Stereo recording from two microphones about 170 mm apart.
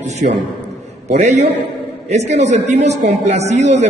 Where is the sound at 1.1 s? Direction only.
45° right (ahead or behind).